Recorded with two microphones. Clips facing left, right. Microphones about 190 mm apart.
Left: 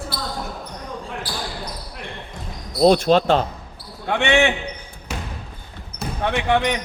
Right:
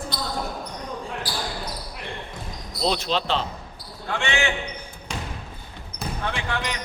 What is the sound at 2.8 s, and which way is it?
Speech, 50° left (ahead or behind).